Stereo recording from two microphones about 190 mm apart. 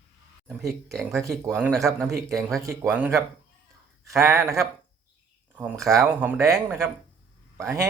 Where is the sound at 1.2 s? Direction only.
15° right (ahead or behind).